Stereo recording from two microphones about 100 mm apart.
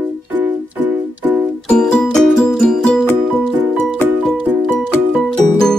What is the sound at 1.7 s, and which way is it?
Music, 10° left (ahead or behind).